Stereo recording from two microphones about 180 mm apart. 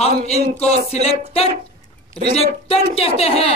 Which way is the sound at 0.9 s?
35° left (ahead or behind).